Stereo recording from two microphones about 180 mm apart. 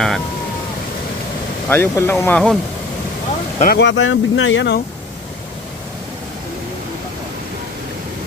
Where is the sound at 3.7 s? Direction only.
85° left.